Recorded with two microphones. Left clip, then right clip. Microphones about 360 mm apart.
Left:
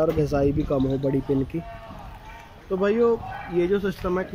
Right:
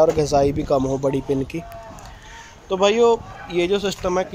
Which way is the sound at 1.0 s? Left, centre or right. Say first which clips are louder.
Right 3 dB; right.